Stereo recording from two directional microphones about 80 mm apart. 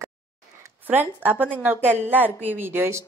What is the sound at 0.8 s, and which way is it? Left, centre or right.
A woman's voice, right.